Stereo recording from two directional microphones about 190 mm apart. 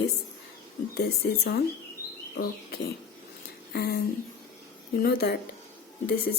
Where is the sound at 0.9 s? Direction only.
60° left (ahead or behind).